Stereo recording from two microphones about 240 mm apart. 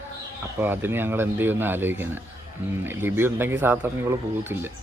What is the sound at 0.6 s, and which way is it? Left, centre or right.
Speech, centre.